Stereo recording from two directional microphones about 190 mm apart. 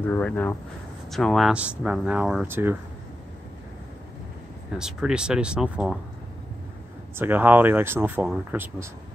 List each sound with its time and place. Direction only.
0.0 s speech: 10° left (ahead or behind); by 2.8 s 10° right (ahead or behind)
4.7 s speech: 5° right (ahead or behind)
7.2 s speech: 10° right (ahead or behind)